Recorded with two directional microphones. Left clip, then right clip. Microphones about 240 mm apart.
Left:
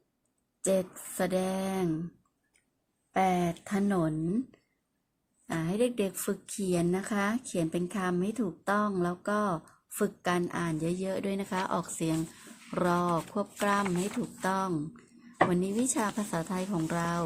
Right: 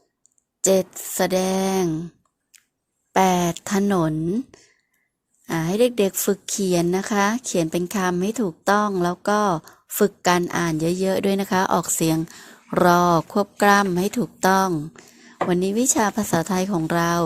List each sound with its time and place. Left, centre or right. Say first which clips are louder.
0.6 s a woman's voice: right 10 dB; right
3.1 s a woman's voice: right 9 dB; right
5.5 s a woman's voice: right 10 dB; right